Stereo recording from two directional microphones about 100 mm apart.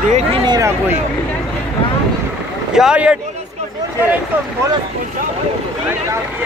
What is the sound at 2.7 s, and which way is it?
Speech, 10° right (ahead or behind).